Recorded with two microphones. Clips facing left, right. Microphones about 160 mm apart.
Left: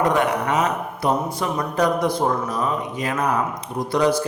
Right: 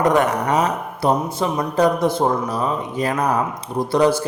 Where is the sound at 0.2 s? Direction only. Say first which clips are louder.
Right 2 dB; 40° right (ahead or behind).